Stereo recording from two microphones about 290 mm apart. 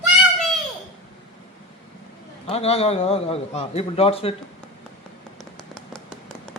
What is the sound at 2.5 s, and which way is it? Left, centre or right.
A man's voice, left.